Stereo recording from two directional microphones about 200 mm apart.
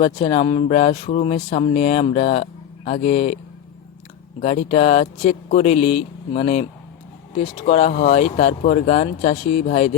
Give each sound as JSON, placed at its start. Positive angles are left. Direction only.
{"t": 0.0, "sound": "speech", "side_deg": 25}
{"t": 4.4, "sound": "speech", "side_deg": 30}